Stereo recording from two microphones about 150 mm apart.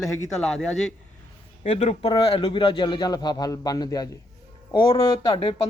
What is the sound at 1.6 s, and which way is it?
Speech, 45° left (ahead or behind).